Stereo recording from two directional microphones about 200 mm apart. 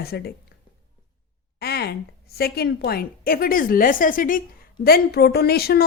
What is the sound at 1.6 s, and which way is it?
A woman's voice, 55° left (ahead or behind).